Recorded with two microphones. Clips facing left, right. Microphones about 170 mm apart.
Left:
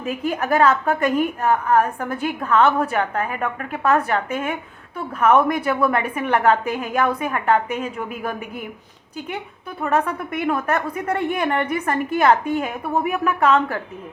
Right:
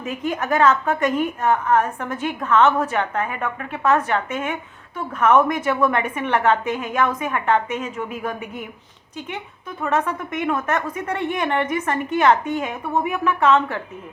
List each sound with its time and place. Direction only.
0.0 s a woman's voice: 35° left (ahead or behind)
9.8 s a woman's voice: 35° left (ahead or behind)